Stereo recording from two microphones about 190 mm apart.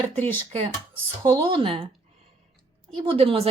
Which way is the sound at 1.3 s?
25° right (ahead or behind).